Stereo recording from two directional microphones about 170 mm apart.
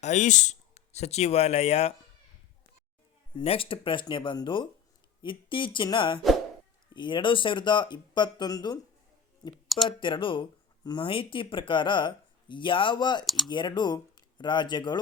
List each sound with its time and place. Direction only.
0.0 s speech: 45° left (ahead or behind)
3.4 s speech: 35° left (ahead or behind)
10.0 s speech: 30° left (ahead or behind)
13.2 s speech: centre (ahead or behind)
13.5 s speech: 25° left (ahead or behind)